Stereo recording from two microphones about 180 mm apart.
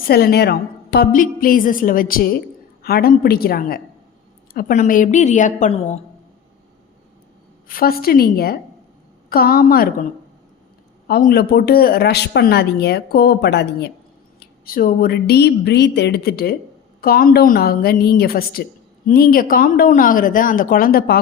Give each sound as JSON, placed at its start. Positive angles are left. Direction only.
{"t": 0.1, "sound": "a woman's voice", "side_deg": 60}
{"t": 4.5, "sound": "a woman's voice", "side_deg": 45}
{"t": 7.7, "sound": "speech", "side_deg": 55}
{"t": 11.1, "sound": "speech", "side_deg": 60}
{"t": 14.3, "sound": "a woman's voice", "side_deg": 55}